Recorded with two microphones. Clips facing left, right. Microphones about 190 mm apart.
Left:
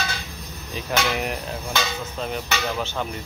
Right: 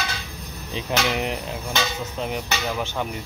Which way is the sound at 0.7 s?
20° right (ahead or behind).